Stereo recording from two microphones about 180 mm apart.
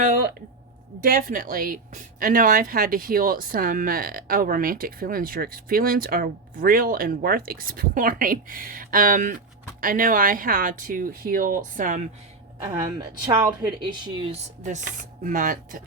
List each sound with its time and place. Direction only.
0.0 s a woman's voice: 50° right (ahead or behind)
13.0 s a woman's voice: 25° right (ahead or behind)
14.6 s a woman's voice: 45° right (ahead or behind)